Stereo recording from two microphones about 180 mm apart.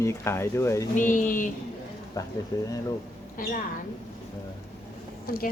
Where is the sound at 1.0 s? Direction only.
50° left (ahead or behind).